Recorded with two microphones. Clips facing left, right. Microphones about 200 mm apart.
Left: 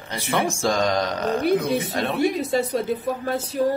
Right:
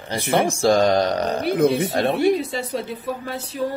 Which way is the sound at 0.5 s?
35° right (ahead or behind).